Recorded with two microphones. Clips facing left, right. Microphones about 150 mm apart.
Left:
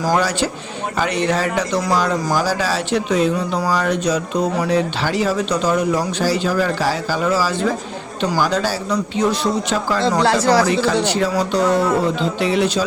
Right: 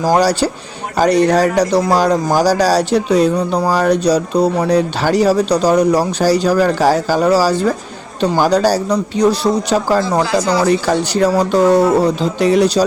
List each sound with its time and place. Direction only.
0.1 s speech: 35° right (ahead or behind)
10.2 s speech: 70° left (ahead or behind)
10.7 s speech: 40° right (ahead or behind)